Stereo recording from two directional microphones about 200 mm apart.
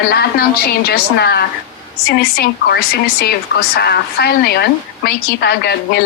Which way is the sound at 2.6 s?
55° left (ahead or behind).